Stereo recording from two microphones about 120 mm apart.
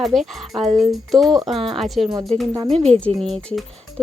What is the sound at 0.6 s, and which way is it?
Music, 80° right.